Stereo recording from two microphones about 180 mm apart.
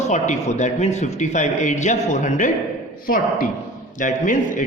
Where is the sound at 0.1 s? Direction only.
40° left (ahead or behind).